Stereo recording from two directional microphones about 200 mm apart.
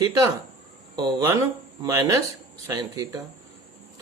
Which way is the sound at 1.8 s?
15° right (ahead or behind).